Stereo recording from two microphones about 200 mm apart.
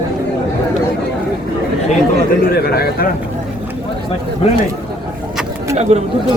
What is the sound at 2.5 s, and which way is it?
Speech, 50° left (ahead or behind).